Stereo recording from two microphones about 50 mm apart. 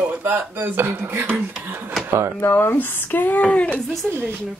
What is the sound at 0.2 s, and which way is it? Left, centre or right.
Speech, right.